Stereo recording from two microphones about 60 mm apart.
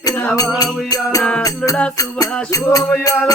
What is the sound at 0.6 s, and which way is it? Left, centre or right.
Music, left.